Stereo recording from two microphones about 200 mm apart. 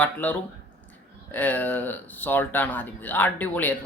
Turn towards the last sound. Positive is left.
turn(degrees=10)  # may be behind; listen again after turning